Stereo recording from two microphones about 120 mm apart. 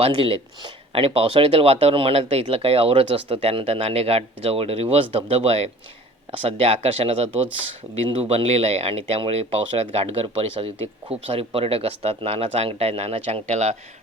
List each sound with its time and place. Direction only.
0.0 s speech: 50° right (ahead or behind); by 13.7 s 65° right (ahead or behind)